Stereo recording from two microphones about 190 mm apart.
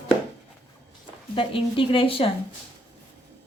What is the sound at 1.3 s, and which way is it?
Speech, 30° left (ahead or behind).